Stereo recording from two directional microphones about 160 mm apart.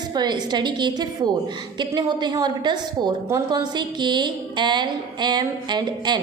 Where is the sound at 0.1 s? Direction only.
25° right (ahead or behind).